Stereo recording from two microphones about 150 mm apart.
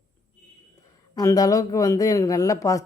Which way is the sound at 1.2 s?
25° left (ahead or behind).